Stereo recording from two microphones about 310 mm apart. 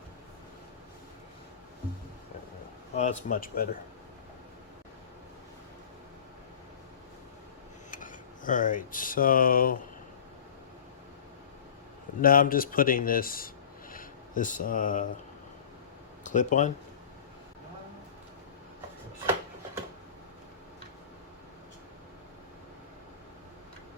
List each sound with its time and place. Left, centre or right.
2.9 s speech: left
7.9 s speech: left
12.2 s speech: left
13.9 s a sound: left
16.2 s speech: left
19.2 s a sound: centre